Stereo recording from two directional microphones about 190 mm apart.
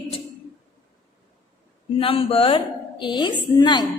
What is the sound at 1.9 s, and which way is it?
A woman's voice, 30° left (ahead or behind).